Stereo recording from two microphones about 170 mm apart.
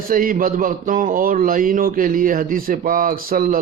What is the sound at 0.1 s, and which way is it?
Speech, 55° right (ahead or behind).